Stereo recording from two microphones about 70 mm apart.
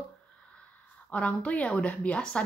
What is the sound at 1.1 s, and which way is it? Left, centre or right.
A woman's voice, centre.